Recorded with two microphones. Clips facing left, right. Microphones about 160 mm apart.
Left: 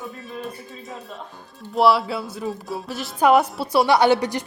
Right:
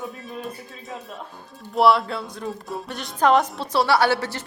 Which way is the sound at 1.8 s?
5° left (ahead or behind).